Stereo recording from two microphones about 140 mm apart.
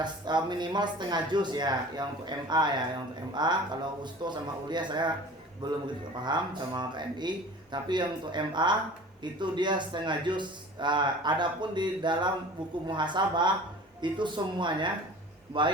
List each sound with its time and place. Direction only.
0.0 s speech: 30° right (ahead or behind)